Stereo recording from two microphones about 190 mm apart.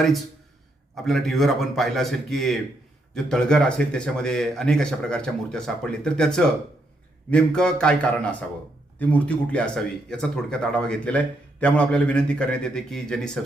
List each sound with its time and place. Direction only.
1.0 s speech: centre (ahead or behind)